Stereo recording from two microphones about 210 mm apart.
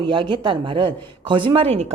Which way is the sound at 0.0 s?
25° right (ahead or behind).